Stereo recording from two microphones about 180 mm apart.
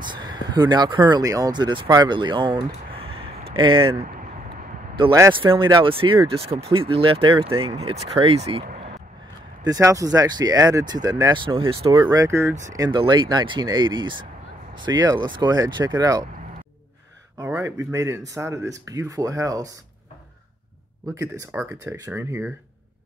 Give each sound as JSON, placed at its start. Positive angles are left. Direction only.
{"t": 0.0, "sound": "speech", "side_deg": -25}
{"t": 5.3, "sound": "speech", "side_deg": -25}
{"t": 9.6, "sound": "speech", "side_deg": -20}
{"t": 11.9, "sound": "speech", "side_deg": -20}
{"t": 17.4, "sound": "speech", "side_deg": -15}
{"t": 21.1, "sound": "speech", "side_deg": -15}